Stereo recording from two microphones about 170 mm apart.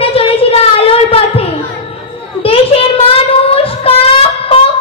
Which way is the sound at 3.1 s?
35° left (ahead or behind).